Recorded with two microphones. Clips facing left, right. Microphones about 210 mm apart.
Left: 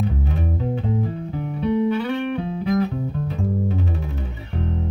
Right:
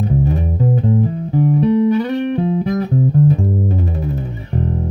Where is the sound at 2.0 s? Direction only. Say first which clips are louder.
Right 6 dB; 40° right (ahead or behind).